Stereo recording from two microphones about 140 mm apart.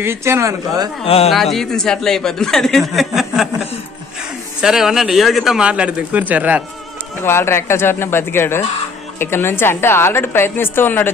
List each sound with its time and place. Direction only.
0.0 s speech: 20° right (ahead or behind)
1.0 s speech: 45° left (ahead or behind)
1.3 s a man's voice: centre (ahead or behind)
7.2 s a woman's voice: 20° left (ahead or behind)